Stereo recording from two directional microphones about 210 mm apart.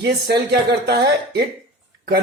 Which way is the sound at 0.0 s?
50° right (ahead or behind).